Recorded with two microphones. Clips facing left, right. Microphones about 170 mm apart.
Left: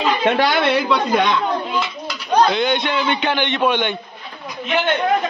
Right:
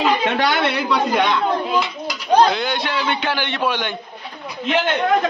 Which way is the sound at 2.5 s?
5° right (ahead or behind).